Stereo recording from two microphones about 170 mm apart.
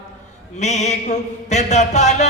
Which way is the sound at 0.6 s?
45° left (ahead or behind).